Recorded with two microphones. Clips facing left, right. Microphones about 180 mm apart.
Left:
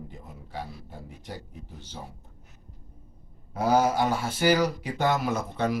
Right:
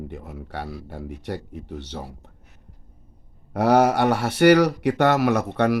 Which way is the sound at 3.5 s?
70° right (ahead or behind).